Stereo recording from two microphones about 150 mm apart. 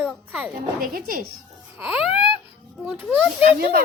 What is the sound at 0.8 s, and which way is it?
Speech, 75° right (ahead or behind).